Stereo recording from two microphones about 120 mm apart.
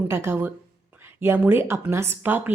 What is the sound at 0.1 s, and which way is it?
A woman's voice, 20° right (ahead or behind).